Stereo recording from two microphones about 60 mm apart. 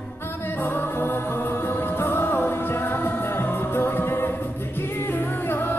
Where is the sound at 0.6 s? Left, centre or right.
Left.